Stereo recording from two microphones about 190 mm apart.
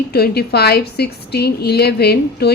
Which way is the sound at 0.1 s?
55° left (ahead or behind).